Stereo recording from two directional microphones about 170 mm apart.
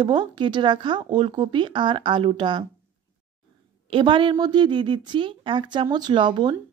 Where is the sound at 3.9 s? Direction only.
30° right (ahead or behind).